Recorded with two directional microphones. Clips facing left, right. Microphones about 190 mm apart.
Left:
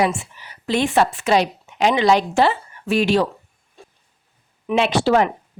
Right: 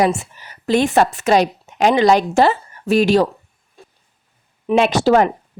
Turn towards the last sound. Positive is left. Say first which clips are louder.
# right 3 dB
turn(degrees=-45)  # may be behind; listen again after turning